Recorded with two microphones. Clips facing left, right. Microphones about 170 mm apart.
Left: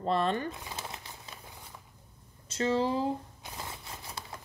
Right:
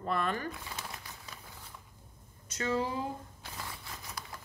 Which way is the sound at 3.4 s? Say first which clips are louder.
Left 2 dB; 25° left (ahead or behind).